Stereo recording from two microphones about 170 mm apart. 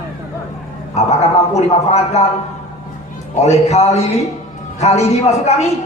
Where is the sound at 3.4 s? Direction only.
40° left (ahead or behind).